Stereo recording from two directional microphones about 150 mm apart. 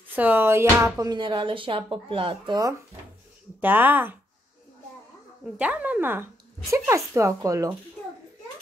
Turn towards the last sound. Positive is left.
turn(degrees=-20)  # may be behind; listen again after turning